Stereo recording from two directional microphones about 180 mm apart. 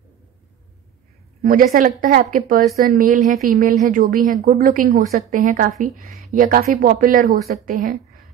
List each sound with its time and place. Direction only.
1.4 s a woman's voice: 50° right (ahead or behind)